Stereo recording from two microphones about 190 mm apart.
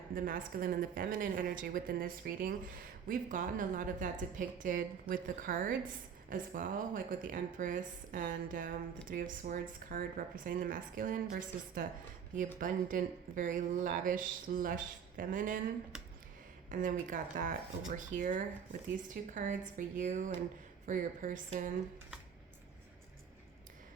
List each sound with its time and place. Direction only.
0.1 s a woman's voice: 45° right (ahead or behind)
16.7 s a woman's voice: 45° right (ahead or behind)